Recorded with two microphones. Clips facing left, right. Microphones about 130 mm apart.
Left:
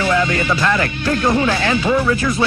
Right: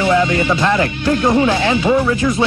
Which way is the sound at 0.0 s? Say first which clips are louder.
Right 3 dB; 20° right (ahead or behind).